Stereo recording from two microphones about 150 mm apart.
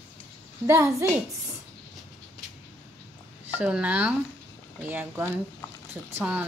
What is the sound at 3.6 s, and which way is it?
Speech, 10° right (ahead or behind).